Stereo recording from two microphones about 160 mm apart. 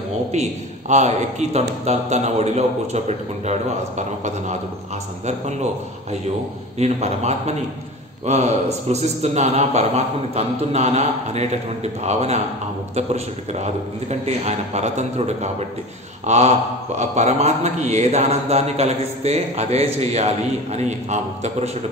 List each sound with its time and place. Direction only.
0.3 s a man's voice: 45° right (ahead or behind)
6.8 s a man's voice: 45° right (ahead or behind)